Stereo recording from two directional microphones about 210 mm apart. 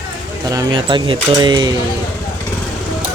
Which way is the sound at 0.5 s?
20° right (ahead or behind).